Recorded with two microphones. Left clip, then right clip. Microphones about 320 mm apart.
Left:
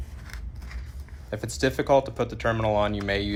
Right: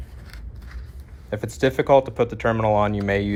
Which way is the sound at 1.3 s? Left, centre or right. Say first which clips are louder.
Right 4 dB; right.